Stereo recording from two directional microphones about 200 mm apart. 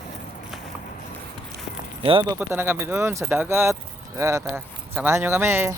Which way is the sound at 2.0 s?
25° right (ahead or behind).